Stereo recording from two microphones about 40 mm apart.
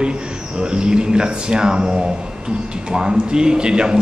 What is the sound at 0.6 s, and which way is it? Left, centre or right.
A man's voice, right.